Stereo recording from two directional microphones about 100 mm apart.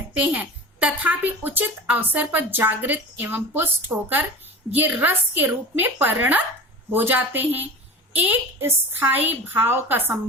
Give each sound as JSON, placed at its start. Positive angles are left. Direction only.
{"t": 0.2, "sound": "a woman's voice", "side_deg": -15}